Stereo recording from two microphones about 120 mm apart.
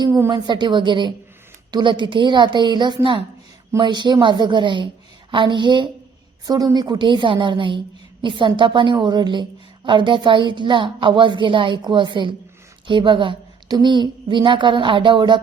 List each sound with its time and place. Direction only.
0.3 s a woman's voice: 40° right (ahead or behind)